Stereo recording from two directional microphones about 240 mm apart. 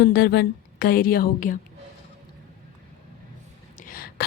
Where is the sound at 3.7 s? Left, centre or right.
Left.